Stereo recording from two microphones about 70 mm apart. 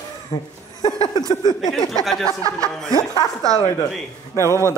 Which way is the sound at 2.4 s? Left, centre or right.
Right.